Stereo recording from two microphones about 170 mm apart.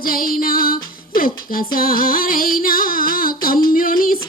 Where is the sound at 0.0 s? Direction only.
55° left (ahead or behind).